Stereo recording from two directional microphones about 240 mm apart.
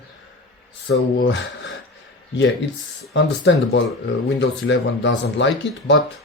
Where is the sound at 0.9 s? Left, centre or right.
Left.